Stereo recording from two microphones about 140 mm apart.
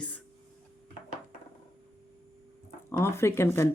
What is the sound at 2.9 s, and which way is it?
Speech, 20° left (ahead or behind).